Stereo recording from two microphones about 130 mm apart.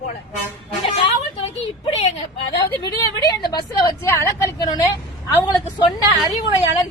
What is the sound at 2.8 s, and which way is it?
A woman's voice, 30° left (ahead or behind).